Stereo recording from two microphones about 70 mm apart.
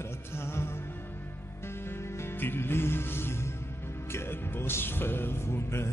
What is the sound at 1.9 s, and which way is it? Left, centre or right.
Music, left.